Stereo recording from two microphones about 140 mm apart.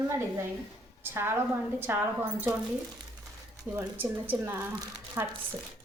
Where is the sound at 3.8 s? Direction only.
15° right (ahead or behind).